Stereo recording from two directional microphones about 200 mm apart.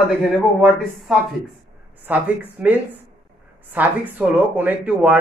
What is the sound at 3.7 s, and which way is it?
Speech, 10° right (ahead or behind).